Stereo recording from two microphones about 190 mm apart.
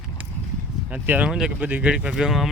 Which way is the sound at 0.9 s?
10° right (ahead or behind).